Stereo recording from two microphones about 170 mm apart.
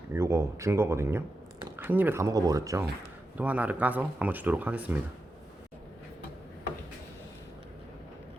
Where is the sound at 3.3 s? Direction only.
10° right (ahead or behind).